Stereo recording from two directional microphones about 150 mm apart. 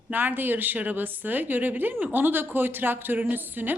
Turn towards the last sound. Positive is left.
turn(degrees=-15)  # may be behind; listen again after turning